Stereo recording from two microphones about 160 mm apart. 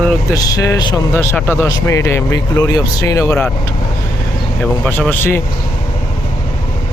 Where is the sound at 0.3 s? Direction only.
20° left (ahead or behind).